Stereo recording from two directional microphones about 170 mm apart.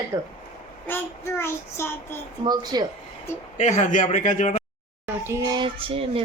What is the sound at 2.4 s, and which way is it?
Speech, 25° right (ahead or behind).